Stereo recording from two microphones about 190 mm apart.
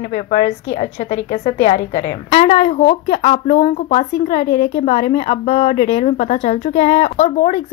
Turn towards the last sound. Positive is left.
turn(degrees=40)  # may be behind; listen again after turning